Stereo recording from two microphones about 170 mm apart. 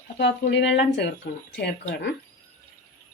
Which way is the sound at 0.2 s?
90° left.